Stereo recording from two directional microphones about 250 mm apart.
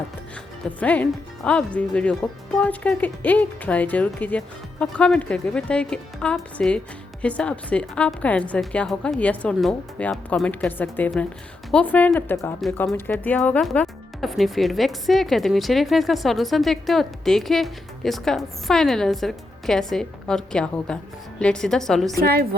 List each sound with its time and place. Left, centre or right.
0.8 s a woman's voice: centre
22.2 s a woman's voice: right